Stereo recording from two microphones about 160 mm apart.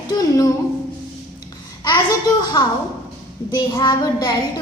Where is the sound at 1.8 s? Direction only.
25° left (ahead or behind).